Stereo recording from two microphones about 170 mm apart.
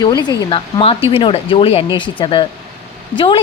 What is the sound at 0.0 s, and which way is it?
A woman's voice, 25° left (ahead or behind).